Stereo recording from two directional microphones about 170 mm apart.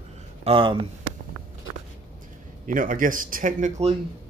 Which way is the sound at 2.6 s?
50° right (ahead or behind).